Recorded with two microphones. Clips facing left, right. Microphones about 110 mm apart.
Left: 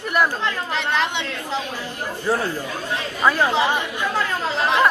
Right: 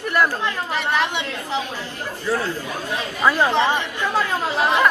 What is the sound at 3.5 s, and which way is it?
Speech, 10° left (ahead or behind).